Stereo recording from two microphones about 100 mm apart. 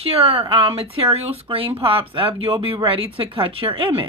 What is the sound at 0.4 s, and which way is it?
Speech, 60° right (ahead or behind).